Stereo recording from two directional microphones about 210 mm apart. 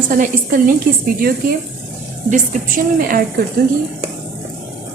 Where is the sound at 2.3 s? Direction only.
35° right (ahead or behind).